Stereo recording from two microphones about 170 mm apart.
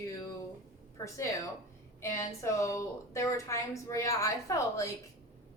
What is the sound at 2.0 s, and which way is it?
A woman's voice, 20° left (ahead or behind).